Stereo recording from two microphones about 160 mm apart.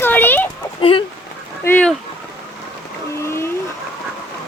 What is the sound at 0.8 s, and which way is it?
Speech, 35° left (ahead or behind).